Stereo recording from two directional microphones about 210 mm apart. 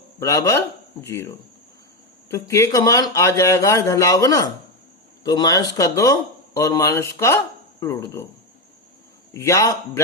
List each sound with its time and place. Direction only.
0.2 s speech: 15° left (ahead or behind)
9.3 s speech: 15° left (ahead or behind)